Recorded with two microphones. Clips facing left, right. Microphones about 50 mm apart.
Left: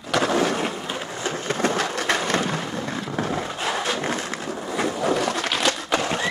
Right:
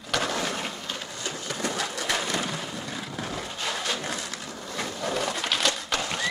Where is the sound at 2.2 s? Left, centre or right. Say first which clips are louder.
Left 6 dB; left.